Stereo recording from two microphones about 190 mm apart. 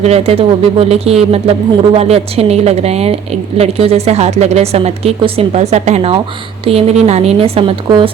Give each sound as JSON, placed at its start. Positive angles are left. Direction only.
{"t": 0.0, "sound": "a woman's voice", "side_deg": -35}